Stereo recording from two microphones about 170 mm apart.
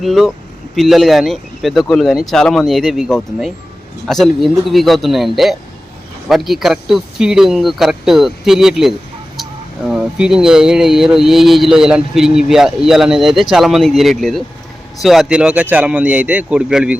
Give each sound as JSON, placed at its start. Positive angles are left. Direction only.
{"t": 0.0, "sound": "speech", "side_deg": 0}